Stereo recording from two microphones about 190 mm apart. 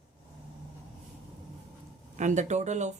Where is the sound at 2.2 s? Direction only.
40° right (ahead or behind).